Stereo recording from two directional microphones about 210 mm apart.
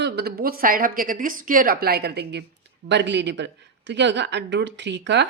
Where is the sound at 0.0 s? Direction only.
50° right (ahead or behind).